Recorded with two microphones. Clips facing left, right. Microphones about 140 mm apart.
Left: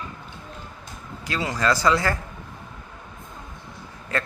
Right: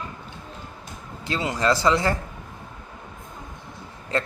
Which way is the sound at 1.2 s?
25° right (ahead or behind).